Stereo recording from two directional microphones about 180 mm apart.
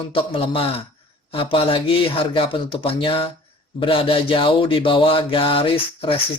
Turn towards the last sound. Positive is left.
turn(degrees=30)  # may be behind; listen again after turning